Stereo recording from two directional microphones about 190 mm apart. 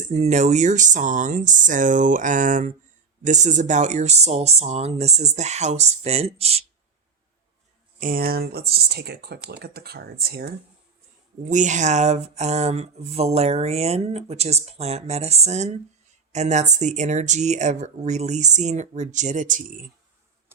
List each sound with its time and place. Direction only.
0.0 s speech: 35° right (ahead or behind)
7.9 s speech: 45° right (ahead or behind)
11.4 s speech: 40° right (ahead or behind)